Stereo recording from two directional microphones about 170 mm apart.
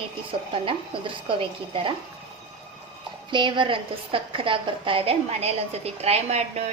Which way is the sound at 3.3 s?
30° right (ahead or behind).